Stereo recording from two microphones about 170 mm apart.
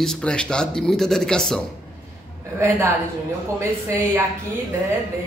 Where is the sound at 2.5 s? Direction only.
15° right (ahead or behind).